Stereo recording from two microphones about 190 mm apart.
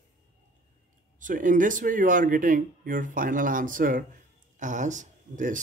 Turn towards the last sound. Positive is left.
turn(degrees=-40)  # may be behind; listen again after turning